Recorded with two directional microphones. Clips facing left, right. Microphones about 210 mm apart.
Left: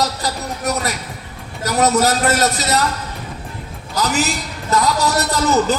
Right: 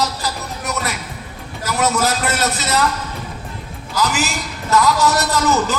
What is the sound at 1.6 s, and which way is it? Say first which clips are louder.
A man's voice: left 3 dB; 40° left (ahead or behind).